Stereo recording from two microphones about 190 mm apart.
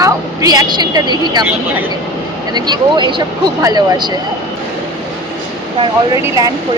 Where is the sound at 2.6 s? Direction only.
20° right (ahead or behind).